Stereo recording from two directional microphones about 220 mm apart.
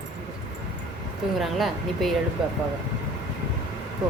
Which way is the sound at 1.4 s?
Centre (ahead or behind).